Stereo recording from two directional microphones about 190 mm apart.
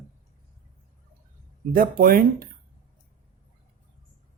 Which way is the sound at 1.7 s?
50° right (ahead or behind).